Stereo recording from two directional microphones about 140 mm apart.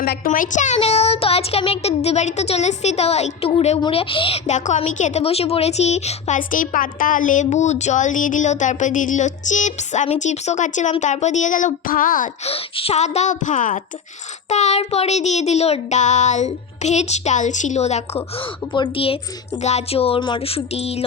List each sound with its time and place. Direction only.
0.0 s a woman's voice: 85° left; by 0.8 s 60° left (ahead or behind)
0.8 s child singing: 50° left (ahead or behind)
3.8 s speech: 40° left (ahead or behind)
4.4 s a woman's voice: 60° left (ahead or behind); by 12.3 s 80° left
12.5 s child singing: 45° left (ahead or behind); by 13.8 s 65° left (ahead or behind)
14.5 s child singing: 50° left (ahead or behind)
18.7 s speech: 35° left (ahead or behind)
19.6 s child singing: 50° left (ahead or behind)